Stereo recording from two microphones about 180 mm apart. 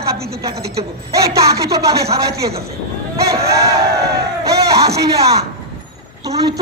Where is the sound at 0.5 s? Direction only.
60° right (ahead or behind).